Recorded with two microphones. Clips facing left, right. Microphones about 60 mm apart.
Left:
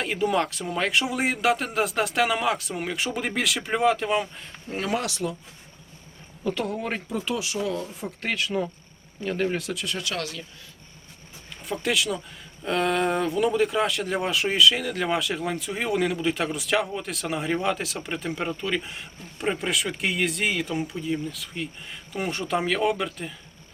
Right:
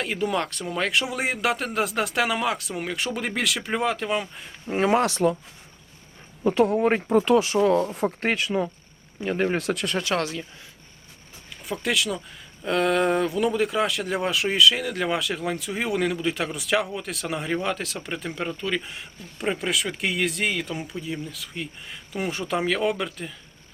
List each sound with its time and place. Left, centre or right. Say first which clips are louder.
0.0 s speech: left 2 dB; centre
4.7 s speech: right 7 dB; right
6.4 s speech: right 8 dB; right
7.1 s speech: right 10 dB; right
8.2 s speech: even; right
8.4 s speech: right 2 dB; centre
9.6 s speech: right 5 dB; right
10.0 s speech: right 5 dB; right
11.6 s speech: even; centre